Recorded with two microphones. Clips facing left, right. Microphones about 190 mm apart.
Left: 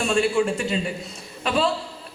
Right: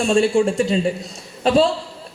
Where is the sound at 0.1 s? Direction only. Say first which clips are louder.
Right 5 dB; 30° right (ahead or behind).